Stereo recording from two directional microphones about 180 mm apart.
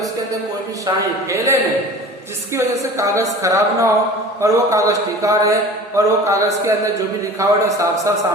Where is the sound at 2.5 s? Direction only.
15° right (ahead or behind).